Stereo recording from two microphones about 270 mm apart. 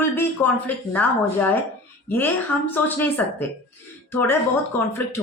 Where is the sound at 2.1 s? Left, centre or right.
Centre.